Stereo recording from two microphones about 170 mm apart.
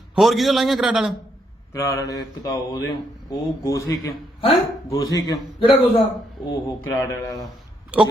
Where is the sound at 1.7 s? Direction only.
15° left (ahead or behind).